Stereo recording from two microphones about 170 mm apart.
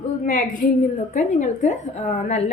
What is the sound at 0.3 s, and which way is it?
A woman's voice, 55° left (ahead or behind).